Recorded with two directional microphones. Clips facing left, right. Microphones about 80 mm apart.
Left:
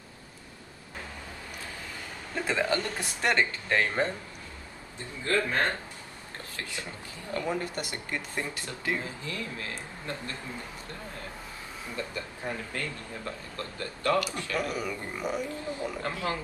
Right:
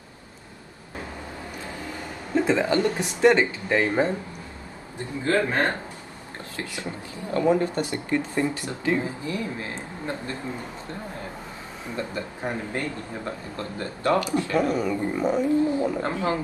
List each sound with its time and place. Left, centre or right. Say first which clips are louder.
2.4 s speech: right 6 dB; right
7.3 s speech: right 10 dB; right
12.0 s speech: right 6 dB; right